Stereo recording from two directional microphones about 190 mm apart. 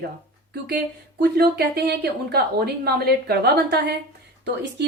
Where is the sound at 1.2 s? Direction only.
60° right (ahead or behind).